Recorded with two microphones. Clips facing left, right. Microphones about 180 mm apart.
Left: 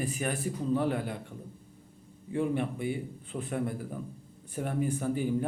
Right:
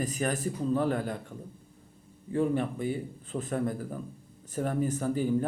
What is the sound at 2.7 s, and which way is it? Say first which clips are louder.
Speech: right 1 dB; 40° right (ahead or behind).